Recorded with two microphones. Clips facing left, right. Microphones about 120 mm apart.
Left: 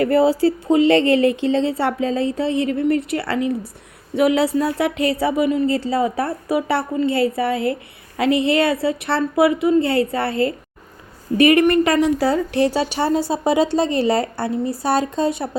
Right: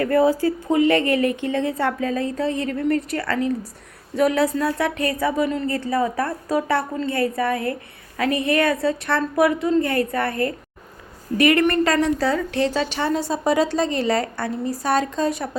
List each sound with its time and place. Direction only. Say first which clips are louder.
0.0 s a woman's voice: left 2 dB; 25° left (ahead or behind)
5.9 s a woman's voice: left 2 dB; 25° left (ahead or behind)
12.2 s a woman's voice: left 3 dB; 30° left (ahead or behind)